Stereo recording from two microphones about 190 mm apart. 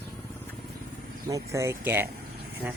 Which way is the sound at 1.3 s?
15° right (ahead or behind).